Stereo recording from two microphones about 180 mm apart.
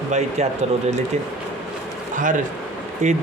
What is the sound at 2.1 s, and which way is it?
A man's voice, 45° right (ahead or behind).